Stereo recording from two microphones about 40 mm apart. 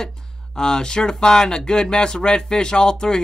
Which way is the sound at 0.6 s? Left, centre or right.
Centre.